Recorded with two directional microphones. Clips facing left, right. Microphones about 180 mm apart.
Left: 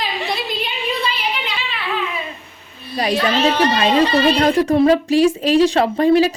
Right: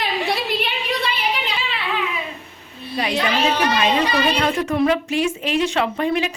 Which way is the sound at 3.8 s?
35° left (ahead or behind).